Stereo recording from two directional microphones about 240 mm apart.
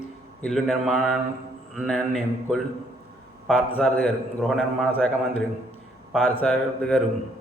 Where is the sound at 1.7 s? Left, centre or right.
Centre.